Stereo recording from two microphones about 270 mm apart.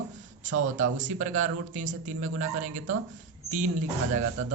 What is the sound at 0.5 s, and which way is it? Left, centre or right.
Speech, right.